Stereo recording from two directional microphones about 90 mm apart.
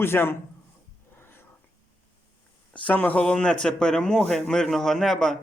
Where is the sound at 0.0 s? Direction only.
25° left (ahead or behind).